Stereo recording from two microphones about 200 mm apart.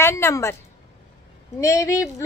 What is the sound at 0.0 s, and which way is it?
Speech, 15° left (ahead or behind).